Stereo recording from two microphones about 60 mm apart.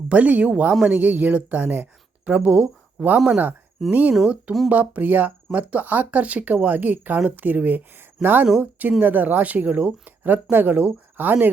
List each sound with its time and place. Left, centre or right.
0.1 s speech: right
0.7 s speech: centre
0.9 s speech: right
3.2 s speech: centre
3.8 s speech: centre
4.7 s speech: right